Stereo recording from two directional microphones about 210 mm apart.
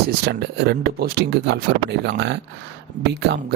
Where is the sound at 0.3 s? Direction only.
50° right (ahead or behind).